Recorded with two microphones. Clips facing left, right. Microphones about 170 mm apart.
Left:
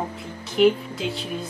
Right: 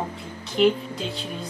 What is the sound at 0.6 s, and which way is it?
Speech, 5° left (ahead or behind).